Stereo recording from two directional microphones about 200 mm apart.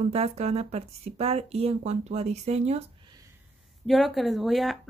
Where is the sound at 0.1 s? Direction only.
30° right (ahead or behind).